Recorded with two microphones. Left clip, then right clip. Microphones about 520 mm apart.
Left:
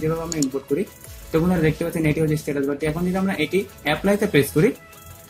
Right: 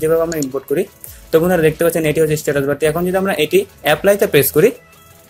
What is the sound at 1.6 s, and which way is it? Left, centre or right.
Speech, centre.